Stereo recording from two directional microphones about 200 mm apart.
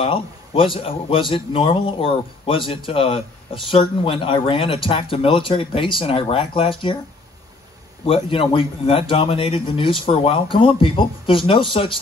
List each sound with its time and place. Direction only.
0.0 s a man's voice: 25° left (ahead or behind)
8.1 s a man's voice: 25° left (ahead or behind)